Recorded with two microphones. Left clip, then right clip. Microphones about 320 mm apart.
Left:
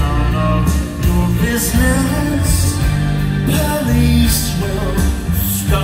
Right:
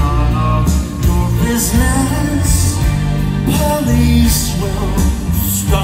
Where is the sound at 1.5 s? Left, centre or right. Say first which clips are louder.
Even; right.